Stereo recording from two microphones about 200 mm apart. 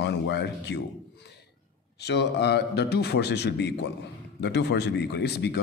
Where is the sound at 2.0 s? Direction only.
60° left (ahead or behind).